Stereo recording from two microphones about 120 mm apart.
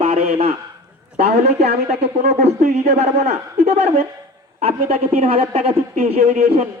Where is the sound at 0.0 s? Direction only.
60° right (ahead or behind).